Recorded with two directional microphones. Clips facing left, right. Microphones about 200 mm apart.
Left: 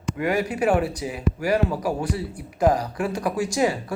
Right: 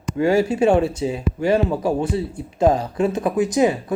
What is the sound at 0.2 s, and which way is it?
Speech, 30° right (ahead or behind).